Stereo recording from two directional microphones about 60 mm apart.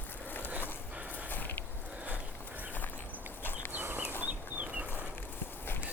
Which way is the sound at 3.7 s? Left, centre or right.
Right.